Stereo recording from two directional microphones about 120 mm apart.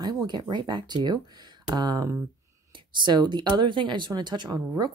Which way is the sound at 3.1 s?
40° right (ahead or behind).